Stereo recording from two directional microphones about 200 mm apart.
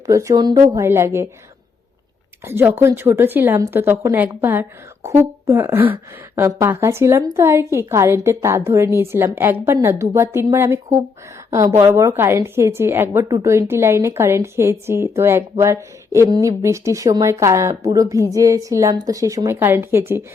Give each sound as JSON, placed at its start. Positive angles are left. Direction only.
{"t": 0.1, "sound": "a woman's voice", "side_deg": -15}
{"t": 2.4, "sound": "a woman's voice", "side_deg": -10}